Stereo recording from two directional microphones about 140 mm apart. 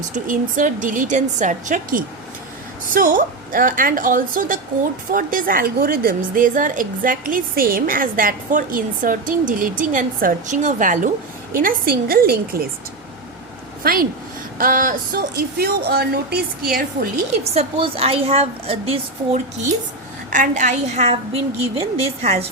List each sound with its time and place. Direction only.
0.1 s a woman's voice: 70° right (ahead or behind)
5.1 s a woman's voice: 85° right
11.5 s speech: 85° right
13.8 s speech: 90° right
17.4 s a woman's voice: 50° right (ahead or behind)
20.3 s a woman's voice: 65° right (ahead or behind); by 22.4 s 45° right (ahead or behind)